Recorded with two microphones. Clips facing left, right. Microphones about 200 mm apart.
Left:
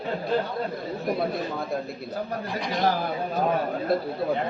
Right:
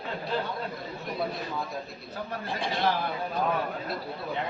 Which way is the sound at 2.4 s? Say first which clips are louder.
Left 3 dB; 30° right (ahead or behind).